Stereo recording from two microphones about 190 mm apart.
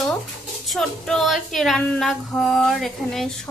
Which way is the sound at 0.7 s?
Centre (ahead or behind).